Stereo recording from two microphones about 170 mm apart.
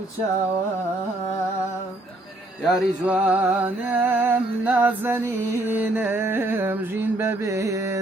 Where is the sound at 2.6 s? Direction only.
Centre (ahead or behind).